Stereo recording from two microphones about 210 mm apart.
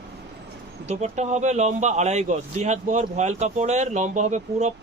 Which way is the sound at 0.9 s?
30° right (ahead or behind).